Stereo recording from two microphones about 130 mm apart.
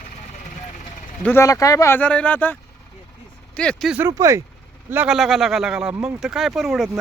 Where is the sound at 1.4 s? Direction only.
25° left (ahead or behind).